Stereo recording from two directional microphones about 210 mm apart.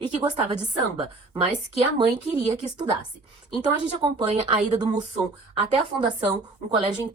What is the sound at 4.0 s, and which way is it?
Speech, 25° right (ahead or behind).